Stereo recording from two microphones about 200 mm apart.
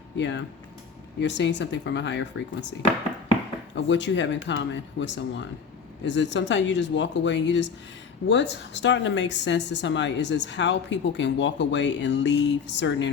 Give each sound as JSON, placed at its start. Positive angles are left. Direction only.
{"t": 0.2, "sound": "speech", "side_deg": 65}
{"t": 3.8, "sound": "speech", "side_deg": 65}